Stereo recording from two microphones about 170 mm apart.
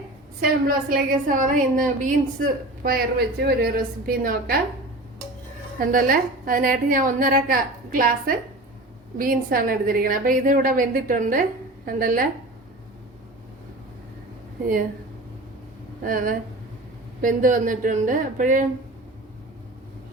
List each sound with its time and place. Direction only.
0.4 s a woman's voice: 55° right (ahead or behind)
5.8 s a woman's voice: 55° right (ahead or behind)
16.0 s a woman's voice: 55° right (ahead or behind)